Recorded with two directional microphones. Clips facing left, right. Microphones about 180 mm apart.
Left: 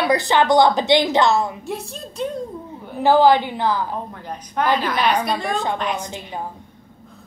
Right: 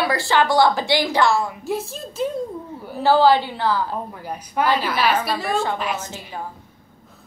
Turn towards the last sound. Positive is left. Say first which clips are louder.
# left 3 dB
turn(degrees=15)  # may be behind; listen again after turning